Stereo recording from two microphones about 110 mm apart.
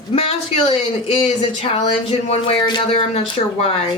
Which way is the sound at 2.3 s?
55° left (ahead or behind).